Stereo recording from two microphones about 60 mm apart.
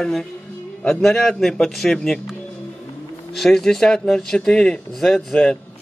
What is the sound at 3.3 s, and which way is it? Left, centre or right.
Speech, centre.